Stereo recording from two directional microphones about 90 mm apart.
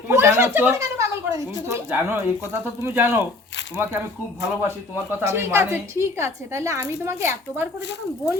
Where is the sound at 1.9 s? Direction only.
25° right (ahead or behind).